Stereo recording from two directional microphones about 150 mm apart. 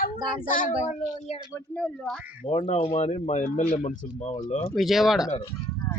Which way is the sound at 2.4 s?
40° left (ahead or behind).